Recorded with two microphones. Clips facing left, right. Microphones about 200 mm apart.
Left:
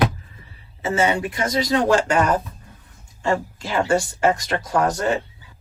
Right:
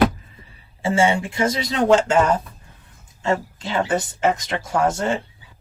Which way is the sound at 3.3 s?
25° right (ahead or behind).